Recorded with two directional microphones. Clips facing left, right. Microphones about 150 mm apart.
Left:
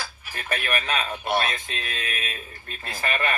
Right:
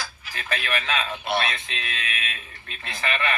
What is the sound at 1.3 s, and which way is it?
Speech, 45° left (ahead or behind).